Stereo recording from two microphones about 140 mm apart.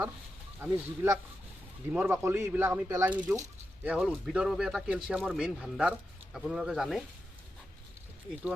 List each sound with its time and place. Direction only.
0.6 s speech: 20° right (ahead or behind)